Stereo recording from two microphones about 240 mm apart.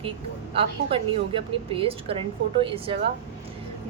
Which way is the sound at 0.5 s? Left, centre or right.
Right.